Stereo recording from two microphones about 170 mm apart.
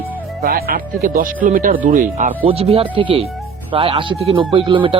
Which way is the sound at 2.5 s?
35° right (ahead or behind).